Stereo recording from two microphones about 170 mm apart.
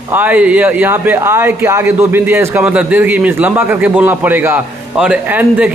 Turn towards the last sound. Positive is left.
turn(degrees=-10)  # may be behind; listen again after turning